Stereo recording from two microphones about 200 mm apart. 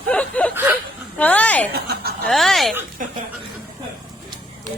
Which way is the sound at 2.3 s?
Centre (ahead or behind).